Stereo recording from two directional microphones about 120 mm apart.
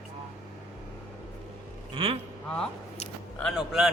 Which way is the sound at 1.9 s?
50° right (ahead or behind).